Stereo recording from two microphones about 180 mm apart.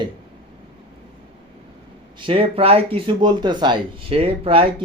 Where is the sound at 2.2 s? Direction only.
30° right (ahead or behind).